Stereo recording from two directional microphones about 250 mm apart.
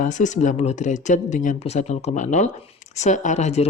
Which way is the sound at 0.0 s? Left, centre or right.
Left.